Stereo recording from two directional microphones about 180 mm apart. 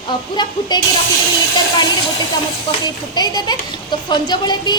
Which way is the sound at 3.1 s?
20° left (ahead or behind).